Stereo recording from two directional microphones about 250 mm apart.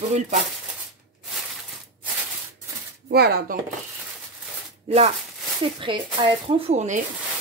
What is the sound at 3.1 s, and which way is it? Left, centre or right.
Speech, right.